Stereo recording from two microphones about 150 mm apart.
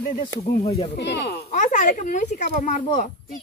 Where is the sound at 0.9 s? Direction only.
90° left.